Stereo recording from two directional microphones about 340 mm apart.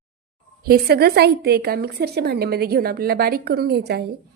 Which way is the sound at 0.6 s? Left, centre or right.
Right.